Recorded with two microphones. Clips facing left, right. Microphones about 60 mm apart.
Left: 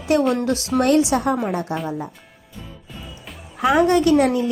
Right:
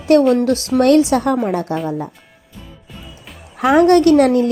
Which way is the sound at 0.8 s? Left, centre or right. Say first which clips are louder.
Right 5 dB; right.